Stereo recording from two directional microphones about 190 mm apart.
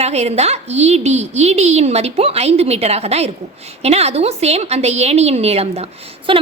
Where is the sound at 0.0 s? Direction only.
35° right (ahead or behind).